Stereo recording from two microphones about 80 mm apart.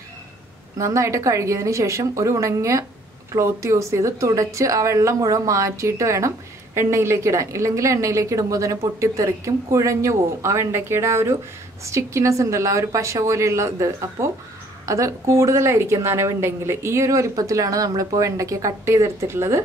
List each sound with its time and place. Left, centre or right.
0.7 s a woman's voice: right